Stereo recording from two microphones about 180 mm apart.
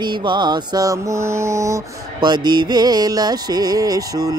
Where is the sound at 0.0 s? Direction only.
25° right (ahead or behind).